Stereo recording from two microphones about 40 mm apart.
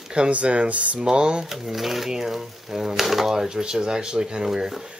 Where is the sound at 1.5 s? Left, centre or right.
Centre.